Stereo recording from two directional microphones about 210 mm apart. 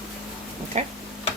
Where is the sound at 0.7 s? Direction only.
30° right (ahead or behind).